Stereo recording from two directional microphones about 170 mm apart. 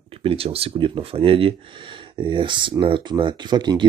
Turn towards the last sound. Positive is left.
turn(degrees=-25)  # may be behind; listen again after turning